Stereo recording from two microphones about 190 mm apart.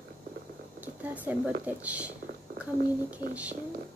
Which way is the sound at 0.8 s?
10° right (ahead or behind).